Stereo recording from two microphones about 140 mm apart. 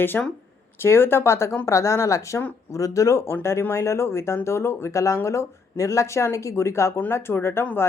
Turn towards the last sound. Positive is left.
turn(degrees=15)  # may be behind; listen again after turning